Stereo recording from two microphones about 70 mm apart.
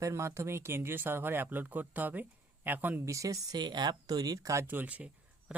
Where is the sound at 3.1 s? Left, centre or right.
Right.